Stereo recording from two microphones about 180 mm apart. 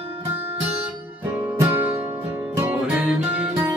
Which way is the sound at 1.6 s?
10° right (ahead or behind).